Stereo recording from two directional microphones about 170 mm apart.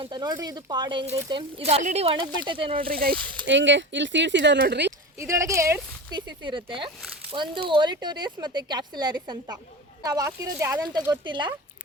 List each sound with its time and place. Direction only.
0.0 s speech: 25° right (ahead or behind)
2.7 s speech: 60° right (ahead or behind)
3.4 s speech: 90° right; by 4.9 s 75° right (ahead or behind)
4.9 s speech: 15° right (ahead or behind)